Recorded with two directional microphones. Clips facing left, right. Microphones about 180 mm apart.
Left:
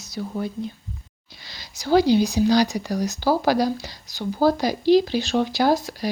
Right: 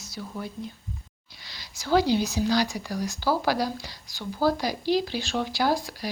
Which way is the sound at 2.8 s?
40° left (ahead or behind).